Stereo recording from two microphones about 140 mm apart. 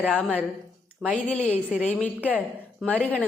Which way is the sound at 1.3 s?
10° left (ahead or behind).